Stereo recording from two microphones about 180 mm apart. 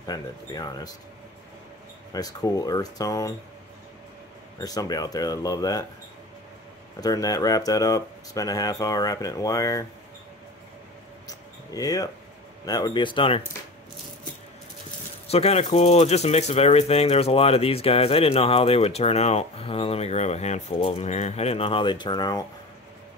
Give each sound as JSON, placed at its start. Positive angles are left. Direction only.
{"t": 0.0, "sound": "speech", "side_deg": 20}
{"t": 2.1, "sound": "speech", "side_deg": 20}
{"t": 4.6, "sound": "speech", "side_deg": 20}
{"t": 7.0, "sound": "speech", "side_deg": 20}
{"t": 11.2, "sound": "mouse", "side_deg": 20}
{"t": 12.6, "sound": "speech", "side_deg": 20}
{"t": 15.2, "sound": "speech", "side_deg": 35}